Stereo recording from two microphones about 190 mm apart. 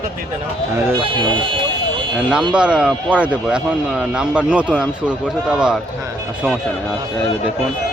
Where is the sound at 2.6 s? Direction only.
5° right (ahead or behind).